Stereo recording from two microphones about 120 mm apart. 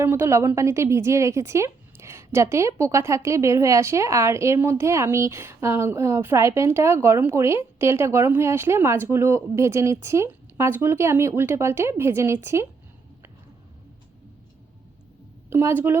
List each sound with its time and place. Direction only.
0.0 s a woman's voice: 20° right (ahead or behind)
15.4 s a woman's voice: 20° right (ahead or behind)